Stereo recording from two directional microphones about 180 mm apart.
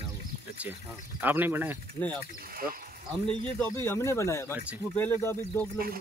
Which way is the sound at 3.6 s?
10° left (ahead or behind).